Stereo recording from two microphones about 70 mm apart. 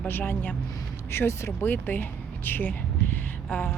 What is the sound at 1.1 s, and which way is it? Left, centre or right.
Speech, left.